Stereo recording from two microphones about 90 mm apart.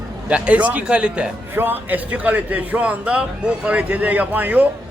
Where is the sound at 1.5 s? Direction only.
25° right (ahead or behind).